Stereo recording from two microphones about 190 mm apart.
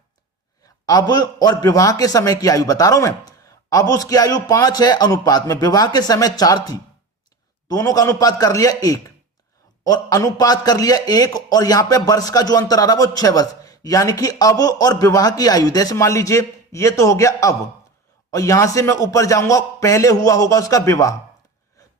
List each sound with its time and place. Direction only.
0.9 s a man's voice: 20° left (ahead or behind)